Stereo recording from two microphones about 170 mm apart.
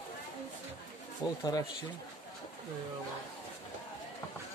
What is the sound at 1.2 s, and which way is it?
Speech, 20° left (ahead or behind).